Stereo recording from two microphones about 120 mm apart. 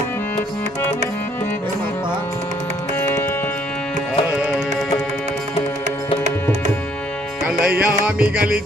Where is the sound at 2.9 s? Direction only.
20° left (ahead or behind).